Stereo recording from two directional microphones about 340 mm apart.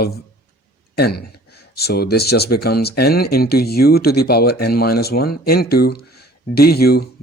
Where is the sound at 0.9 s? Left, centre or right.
Left.